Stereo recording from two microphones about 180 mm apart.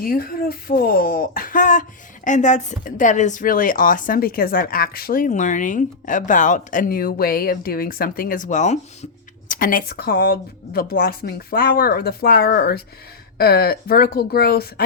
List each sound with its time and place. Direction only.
0.0 s speech: 55° left (ahead or behind)